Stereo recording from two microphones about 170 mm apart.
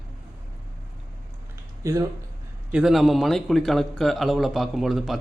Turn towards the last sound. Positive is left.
turn(degrees=0)  # may be behind; listen again after turning